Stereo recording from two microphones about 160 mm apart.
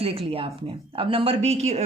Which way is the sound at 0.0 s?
35° right (ahead or behind).